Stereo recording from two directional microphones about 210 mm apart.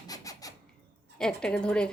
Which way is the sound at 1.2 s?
5° left (ahead or behind).